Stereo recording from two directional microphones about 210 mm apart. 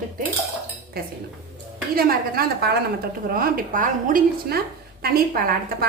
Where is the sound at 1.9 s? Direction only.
45° right (ahead or behind).